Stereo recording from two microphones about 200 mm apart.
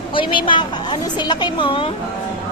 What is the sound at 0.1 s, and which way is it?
A woman's voice, 25° left (ahead or behind).